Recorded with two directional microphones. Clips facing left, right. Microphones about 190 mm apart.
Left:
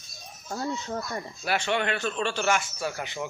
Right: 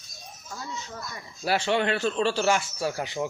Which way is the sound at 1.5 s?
30° right (ahead or behind).